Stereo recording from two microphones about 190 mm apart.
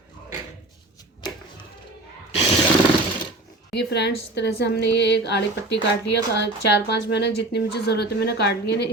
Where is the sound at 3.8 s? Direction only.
65° left (ahead or behind).